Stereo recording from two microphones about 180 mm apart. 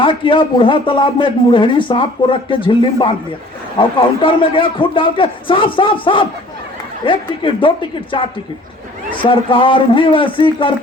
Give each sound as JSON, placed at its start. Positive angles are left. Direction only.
{"t": 0.0, "sound": "speech", "side_deg": 30}